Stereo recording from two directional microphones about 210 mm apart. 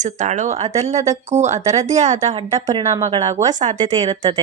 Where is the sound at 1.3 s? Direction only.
30° right (ahead or behind).